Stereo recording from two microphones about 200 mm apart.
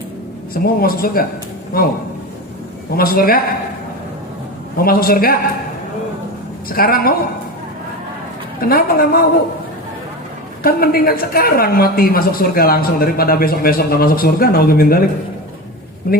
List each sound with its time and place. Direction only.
0.5 s a woman's voice: 45° left (ahead or behind)
2.9 s a woman's voice: 45° left (ahead or behind)
4.8 s a woman's voice: 50° left (ahead or behind)
6.7 s a woman's voice: 45° left (ahead or behind)
8.6 s a woman's voice: 45° left (ahead or behind)
10.6 s a woman's voice: 45° left (ahead or behind)